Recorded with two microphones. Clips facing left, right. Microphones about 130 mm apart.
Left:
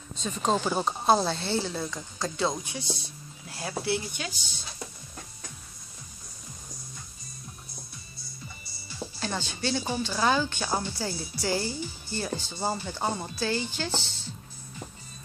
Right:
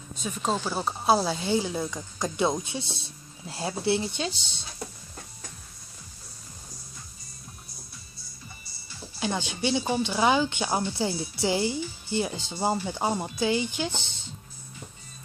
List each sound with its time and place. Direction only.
0.2 s speech: 5° right (ahead or behind); by 4.6 s 25° right (ahead or behind)
9.2 s speech: 15° right (ahead or behind)